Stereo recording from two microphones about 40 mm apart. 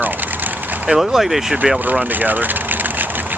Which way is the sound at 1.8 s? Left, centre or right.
Right.